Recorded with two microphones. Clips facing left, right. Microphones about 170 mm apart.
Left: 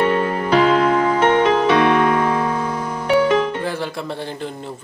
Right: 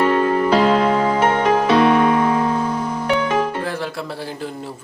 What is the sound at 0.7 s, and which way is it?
Music, 30° right (ahead or behind).